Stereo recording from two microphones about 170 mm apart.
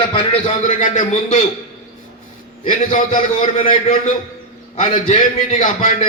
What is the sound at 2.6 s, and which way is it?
A man's voice, 50° left (ahead or behind).